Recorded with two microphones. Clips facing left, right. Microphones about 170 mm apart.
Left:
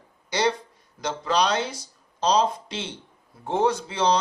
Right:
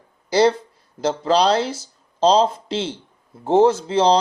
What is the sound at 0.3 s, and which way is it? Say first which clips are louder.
Speech: right 8 dB; 30° right (ahead or behind).